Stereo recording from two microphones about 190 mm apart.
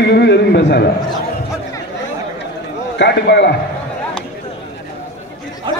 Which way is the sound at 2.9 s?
65° left (ahead or behind).